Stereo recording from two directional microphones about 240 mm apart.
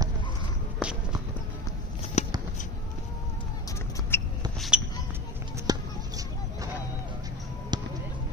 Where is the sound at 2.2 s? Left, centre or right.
Left.